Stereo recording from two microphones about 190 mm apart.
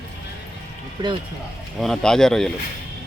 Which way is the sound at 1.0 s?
25° right (ahead or behind).